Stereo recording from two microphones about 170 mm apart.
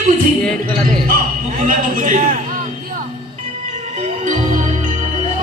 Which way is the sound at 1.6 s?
50° right (ahead or behind).